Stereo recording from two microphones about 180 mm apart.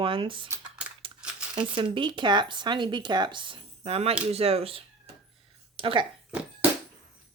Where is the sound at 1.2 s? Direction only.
5° right (ahead or behind).